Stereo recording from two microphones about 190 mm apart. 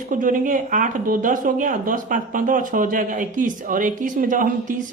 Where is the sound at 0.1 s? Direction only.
45° right (ahead or behind).